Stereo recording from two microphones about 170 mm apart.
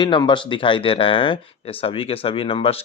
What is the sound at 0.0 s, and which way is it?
A man's voice, 25° left (ahead or behind).